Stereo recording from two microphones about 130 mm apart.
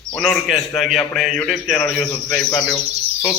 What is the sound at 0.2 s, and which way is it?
A man's voice, centre (ahead or behind).